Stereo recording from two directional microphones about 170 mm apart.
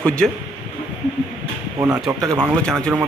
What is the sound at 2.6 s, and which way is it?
Speech, 5° left (ahead or behind).